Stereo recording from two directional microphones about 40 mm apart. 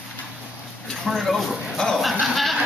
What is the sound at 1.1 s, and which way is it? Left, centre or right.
Speech, centre.